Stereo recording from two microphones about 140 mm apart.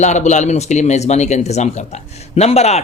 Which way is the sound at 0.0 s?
55° left (ahead or behind).